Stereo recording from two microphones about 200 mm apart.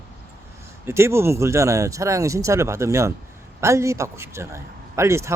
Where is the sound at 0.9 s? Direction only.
15° right (ahead or behind).